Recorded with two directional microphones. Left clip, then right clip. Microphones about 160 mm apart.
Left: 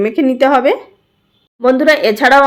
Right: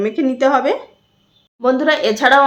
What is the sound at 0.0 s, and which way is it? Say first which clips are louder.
Speech: left 4 dB; 30° left (ahead or behind).